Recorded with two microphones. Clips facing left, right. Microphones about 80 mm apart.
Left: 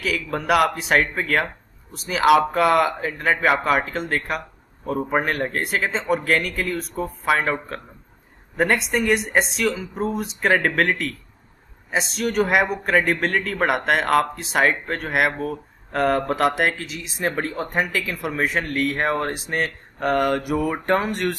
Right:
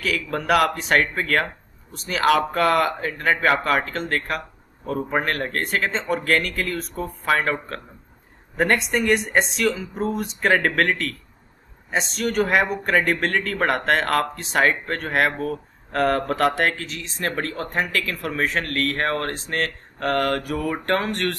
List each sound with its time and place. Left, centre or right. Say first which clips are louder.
0.0 s speech: even; centre